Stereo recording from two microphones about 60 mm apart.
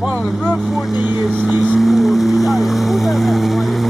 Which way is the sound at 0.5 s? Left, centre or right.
Centre.